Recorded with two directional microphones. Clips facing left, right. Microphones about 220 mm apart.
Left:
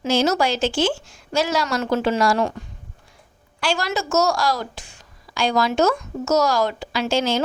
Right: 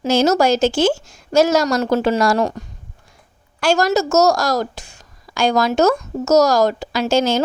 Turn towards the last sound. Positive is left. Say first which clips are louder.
# right 4 dB
turn(degrees=-45)  # may be behind; listen again after turning